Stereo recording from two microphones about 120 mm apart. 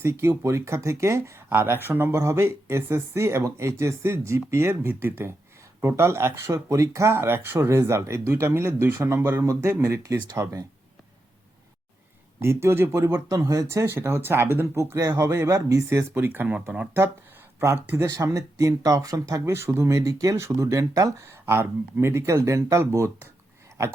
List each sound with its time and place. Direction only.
0.0 s speech: 20° right (ahead or behind)
12.4 s speech: 20° right (ahead or behind); by 16.9 s 5° right (ahead or behind)
17.6 s speech: 20° right (ahead or behind)